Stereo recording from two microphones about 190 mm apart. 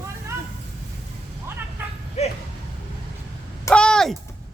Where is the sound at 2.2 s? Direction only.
35° left (ahead or behind).